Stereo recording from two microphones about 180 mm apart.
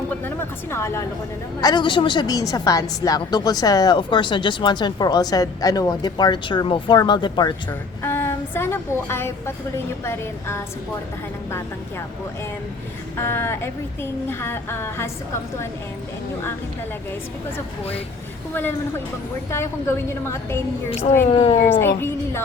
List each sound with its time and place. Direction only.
0.1 s a woman's voice: 10° left (ahead or behind)
7.7 s a woman's voice: 10° left (ahead or behind)
13.1 s a woman's voice: 15° left (ahead or behind)
19.5 s a woman's voice: 15° left (ahead or behind)
21.2 s speech: 30° left (ahead or behind)
21.6 s a woman's voice: 15° left (ahead or behind)